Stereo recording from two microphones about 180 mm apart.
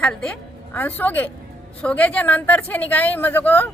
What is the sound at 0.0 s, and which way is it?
A woman's voice, 5° left (ahead or behind).